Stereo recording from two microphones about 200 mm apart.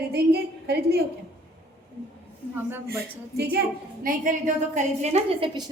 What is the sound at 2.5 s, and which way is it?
Speech, 10° right (ahead or behind).